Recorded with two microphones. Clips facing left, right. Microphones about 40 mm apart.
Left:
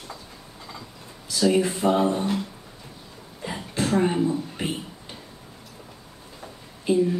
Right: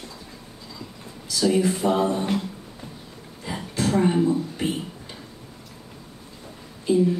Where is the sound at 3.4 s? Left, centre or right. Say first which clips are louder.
Right 1 dB; left.